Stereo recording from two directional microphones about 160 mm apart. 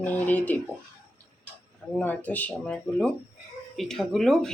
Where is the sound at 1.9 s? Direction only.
10° left (ahead or behind).